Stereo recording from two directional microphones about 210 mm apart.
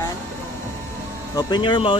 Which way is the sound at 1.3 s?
20° left (ahead or behind).